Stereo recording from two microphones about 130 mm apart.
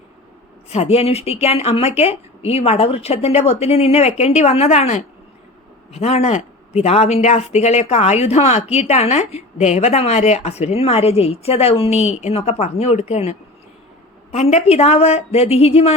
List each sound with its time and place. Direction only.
0.7 s speech: 50° left (ahead or behind)
14.3 s speech: 55° left (ahead or behind)